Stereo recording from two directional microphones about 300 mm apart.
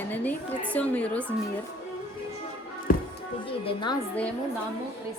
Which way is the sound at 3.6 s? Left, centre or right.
Centre.